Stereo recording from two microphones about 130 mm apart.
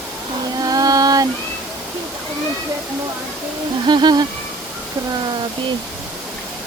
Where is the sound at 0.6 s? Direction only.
30° right (ahead or behind).